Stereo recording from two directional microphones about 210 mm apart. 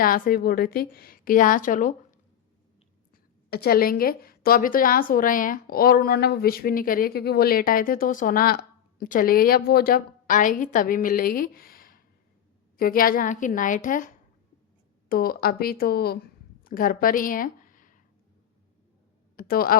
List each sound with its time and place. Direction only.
0.0 s a woman's voice: 45° left (ahead or behind)
3.5 s a woman's voice: 45° left (ahead or behind)
15.1 s speech: 45° left (ahead or behind)
19.4 s speech: 45° left (ahead or behind)